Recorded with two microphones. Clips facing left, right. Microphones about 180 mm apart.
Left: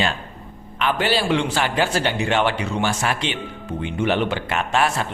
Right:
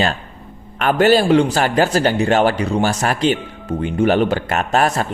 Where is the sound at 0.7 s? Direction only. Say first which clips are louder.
Right 8 dB; 45° right (ahead or behind).